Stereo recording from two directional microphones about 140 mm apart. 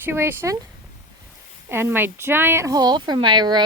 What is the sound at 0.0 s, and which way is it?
Speech, 15° right (ahead or behind).